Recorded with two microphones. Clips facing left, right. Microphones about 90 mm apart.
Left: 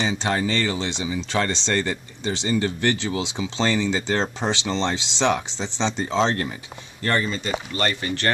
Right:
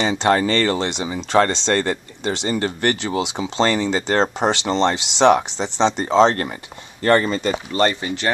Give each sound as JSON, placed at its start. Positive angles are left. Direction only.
{"t": 0.0, "sound": "speech", "side_deg": -60}
{"t": 7.7, "sound": "speech", "side_deg": -25}